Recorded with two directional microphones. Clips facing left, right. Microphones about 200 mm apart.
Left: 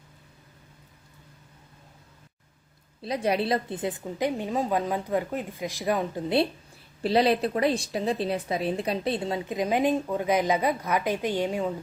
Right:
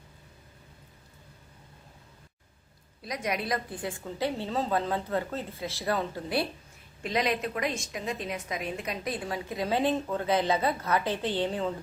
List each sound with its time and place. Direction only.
3.0 s a woman's voice: 30° left (ahead or behind); by 11.7 s 10° left (ahead or behind)